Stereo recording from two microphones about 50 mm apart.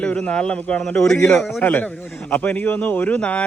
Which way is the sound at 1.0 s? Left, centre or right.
Centre.